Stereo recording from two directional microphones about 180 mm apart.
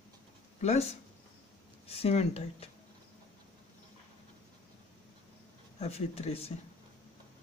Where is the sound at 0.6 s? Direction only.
35° left (ahead or behind).